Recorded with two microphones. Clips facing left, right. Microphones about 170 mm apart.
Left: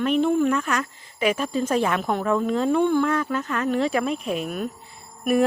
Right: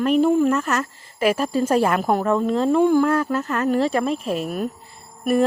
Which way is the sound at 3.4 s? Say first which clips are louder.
Right 3 dB; 35° right (ahead or behind).